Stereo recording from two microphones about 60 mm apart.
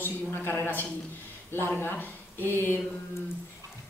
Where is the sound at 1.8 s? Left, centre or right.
Left.